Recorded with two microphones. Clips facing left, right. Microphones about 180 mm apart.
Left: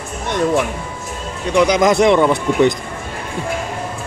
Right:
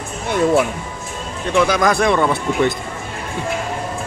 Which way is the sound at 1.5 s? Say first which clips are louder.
Left 3 dB; 20° left (ahead or behind).